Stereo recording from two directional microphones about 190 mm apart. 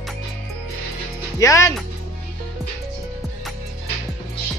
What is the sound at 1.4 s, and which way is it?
Speech, 15° left (ahead or behind).